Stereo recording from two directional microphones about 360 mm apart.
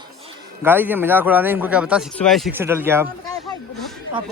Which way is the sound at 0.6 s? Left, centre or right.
Centre.